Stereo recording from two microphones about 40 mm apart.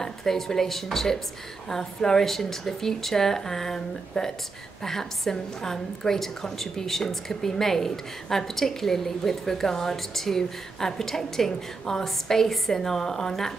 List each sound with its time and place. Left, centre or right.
0.0 s a woman's voice: centre